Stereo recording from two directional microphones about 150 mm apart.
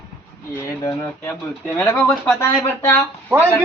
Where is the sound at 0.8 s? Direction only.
25° left (ahead or behind).